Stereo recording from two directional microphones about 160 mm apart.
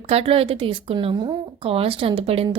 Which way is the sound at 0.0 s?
40° right (ahead or behind).